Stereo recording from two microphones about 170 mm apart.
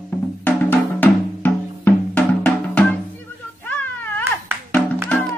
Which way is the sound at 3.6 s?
10° left (ahead or behind).